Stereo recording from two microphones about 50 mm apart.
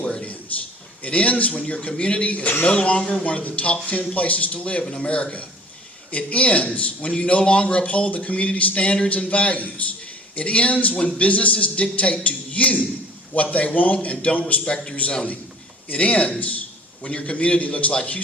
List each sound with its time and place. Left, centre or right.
0.0 s a man's voice: left